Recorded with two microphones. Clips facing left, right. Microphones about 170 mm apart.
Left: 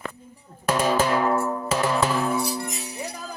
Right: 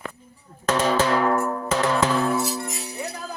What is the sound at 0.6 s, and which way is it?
Music, 10° left (ahead or behind).